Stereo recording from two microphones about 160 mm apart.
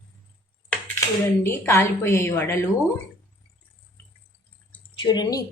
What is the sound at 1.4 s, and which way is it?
A woman's voice, 15° left (ahead or behind).